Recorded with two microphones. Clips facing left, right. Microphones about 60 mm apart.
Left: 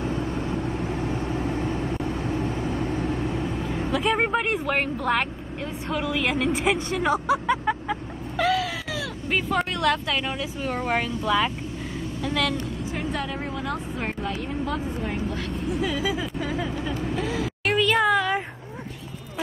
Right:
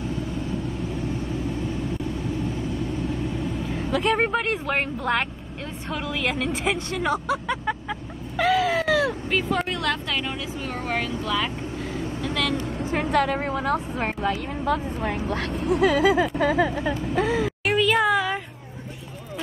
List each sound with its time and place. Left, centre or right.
0.0 s vehicle: left
0.6 s vehicle: left
3.9 s speech: centre
8.4 s a sound: centre
8.7 s a sound: right
9.3 s speech: centre
12.2 s vehicle: centre
12.9 s a woman's voice: right
13.4 s speech: right
15.0 s speech: right
17.6 s a sound: centre